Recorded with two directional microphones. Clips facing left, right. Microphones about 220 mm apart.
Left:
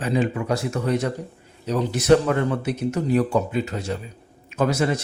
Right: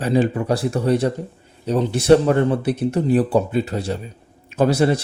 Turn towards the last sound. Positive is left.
turn(degrees=-35)  # may be behind; listen again after turning